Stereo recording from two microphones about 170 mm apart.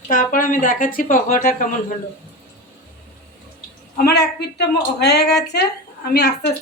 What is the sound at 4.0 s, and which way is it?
Speech, 75° left (ahead or behind).